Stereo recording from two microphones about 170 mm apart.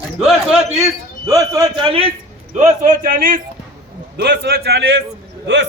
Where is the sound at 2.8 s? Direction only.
55° right (ahead or behind).